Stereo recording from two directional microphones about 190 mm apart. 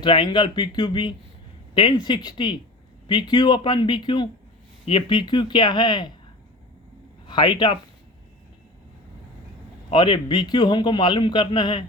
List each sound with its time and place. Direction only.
0.0 s a man's voice: 25° left (ahead or behind)
7.3 s a man's voice: 25° left (ahead or behind)
9.9 s a man's voice: 25° left (ahead or behind)